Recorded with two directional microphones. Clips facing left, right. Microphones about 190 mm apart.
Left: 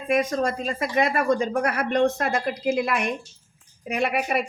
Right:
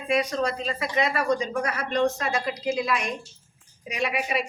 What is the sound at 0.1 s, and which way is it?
A woman's voice, 50° left (ahead or behind).